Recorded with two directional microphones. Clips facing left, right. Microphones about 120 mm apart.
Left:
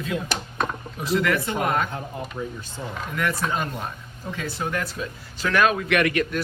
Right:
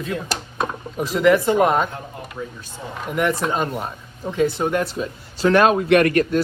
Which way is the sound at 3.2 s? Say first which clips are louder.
Right 5 dB; 20° right (ahead or behind).